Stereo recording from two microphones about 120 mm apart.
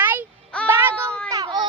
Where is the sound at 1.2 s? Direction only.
30° right (ahead or behind).